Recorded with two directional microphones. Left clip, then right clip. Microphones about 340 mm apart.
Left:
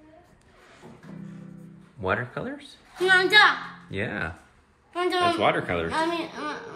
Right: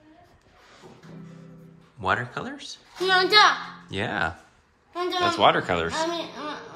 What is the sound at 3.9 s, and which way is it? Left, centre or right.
Speech, centre.